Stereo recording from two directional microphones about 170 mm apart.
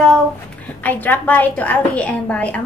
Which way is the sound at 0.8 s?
10° left (ahead or behind).